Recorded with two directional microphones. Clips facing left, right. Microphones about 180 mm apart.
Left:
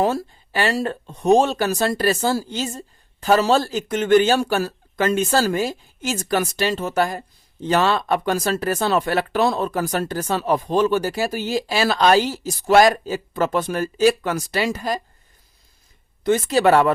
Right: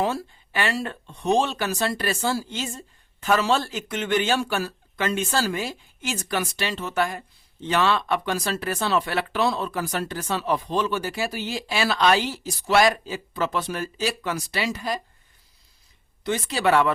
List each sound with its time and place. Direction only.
0.0 s speech: 40° left (ahead or behind)
16.2 s speech: 45° left (ahead or behind)